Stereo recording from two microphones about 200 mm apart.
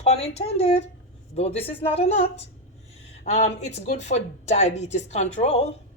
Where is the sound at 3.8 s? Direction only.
35° left (ahead or behind).